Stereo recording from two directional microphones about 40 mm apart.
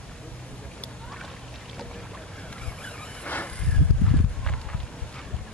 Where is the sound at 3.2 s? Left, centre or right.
Left.